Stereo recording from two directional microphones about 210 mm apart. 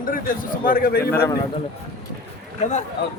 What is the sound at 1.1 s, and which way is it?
Speech, 10° left (ahead or behind).